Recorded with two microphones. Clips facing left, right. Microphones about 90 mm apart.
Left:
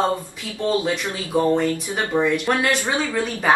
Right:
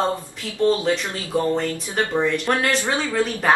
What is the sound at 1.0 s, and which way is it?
A woman's voice, 10° left (ahead or behind).